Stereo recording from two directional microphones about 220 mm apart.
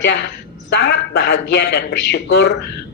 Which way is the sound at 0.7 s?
50° left (ahead or behind).